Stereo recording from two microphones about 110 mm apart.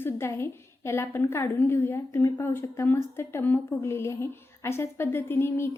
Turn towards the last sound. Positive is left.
turn(degrees=20)  # may be behind; listen again after turning